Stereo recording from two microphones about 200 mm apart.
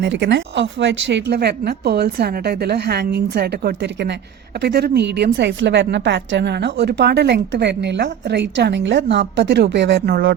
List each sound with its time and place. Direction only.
0.0 s a woman's voice: 60° right (ahead or behind)